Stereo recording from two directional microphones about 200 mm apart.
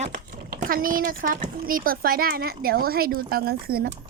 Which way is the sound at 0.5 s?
45° right (ahead or behind).